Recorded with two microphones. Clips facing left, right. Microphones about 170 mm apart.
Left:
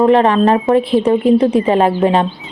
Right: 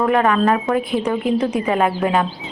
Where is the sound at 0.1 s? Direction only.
25° left (ahead or behind).